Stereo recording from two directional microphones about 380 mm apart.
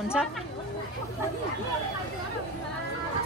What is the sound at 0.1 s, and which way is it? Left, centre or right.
Speech, centre.